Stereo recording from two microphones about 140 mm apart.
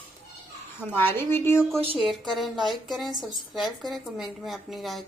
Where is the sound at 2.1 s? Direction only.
Centre (ahead or behind).